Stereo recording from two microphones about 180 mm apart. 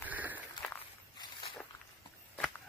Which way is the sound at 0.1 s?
10° right (ahead or behind).